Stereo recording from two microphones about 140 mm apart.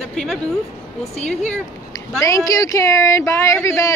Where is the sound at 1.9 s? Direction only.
20° left (ahead or behind).